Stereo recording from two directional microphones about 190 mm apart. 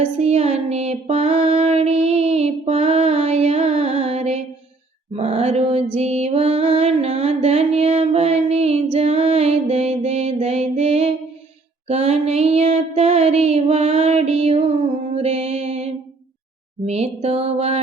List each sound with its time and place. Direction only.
0.0 s female singing: 35° right (ahead or behind)
5.1 s music: 30° right (ahead or behind)
11.9 s a sound: 35° right (ahead or behind)
16.8 s music: 35° right (ahead or behind)